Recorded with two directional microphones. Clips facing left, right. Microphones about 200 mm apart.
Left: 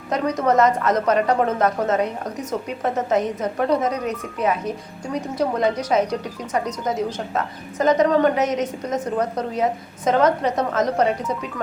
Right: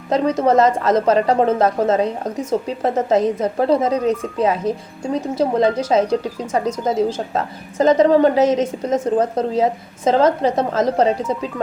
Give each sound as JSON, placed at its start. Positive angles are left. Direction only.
{"t": 0.1, "sound": "speech", "side_deg": -25}